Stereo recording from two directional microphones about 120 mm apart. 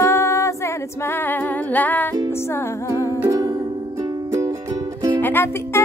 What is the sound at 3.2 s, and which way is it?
Music, 30° right (ahead or behind).